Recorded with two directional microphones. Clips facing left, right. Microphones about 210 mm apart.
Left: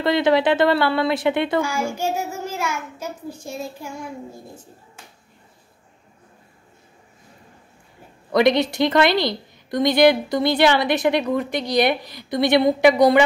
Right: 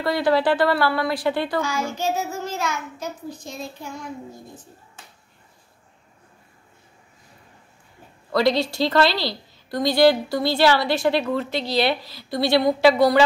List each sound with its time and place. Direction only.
0.0 s a woman's voice: 20° left (ahead or behind)
1.6 s a child's voice: 10° left (ahead or behind)
8.3 s a woman's voice: 20° left (ahead or behind)